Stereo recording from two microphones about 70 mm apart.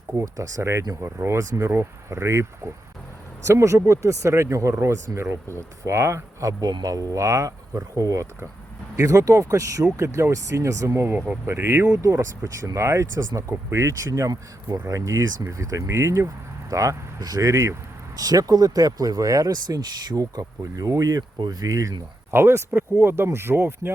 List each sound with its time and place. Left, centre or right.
0.2 s speech: right
6.6 s speech: right
11.9 s speech: right
14.1 s speech: right
17.5 s speech: right
18.2 s speech: right
20.4 s speech: right
21.2 s speech: right
21.7 s speech: right
22.3 s speech: right